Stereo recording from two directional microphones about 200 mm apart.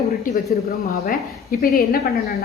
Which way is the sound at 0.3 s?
45° left (ahead or behind).